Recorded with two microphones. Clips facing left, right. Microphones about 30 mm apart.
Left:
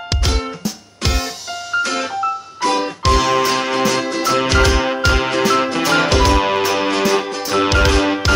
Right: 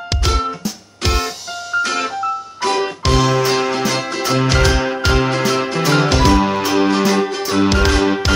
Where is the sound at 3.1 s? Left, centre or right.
Centre.